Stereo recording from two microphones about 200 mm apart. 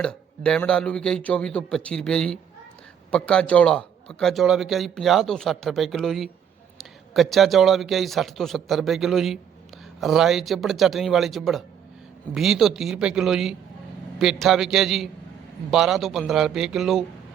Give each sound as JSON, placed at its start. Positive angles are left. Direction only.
{"t": 0.0, "sound": "a man's voice", "side_deg": 5}